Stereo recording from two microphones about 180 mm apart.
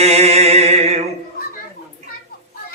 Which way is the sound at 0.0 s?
35° right (ahead or behind).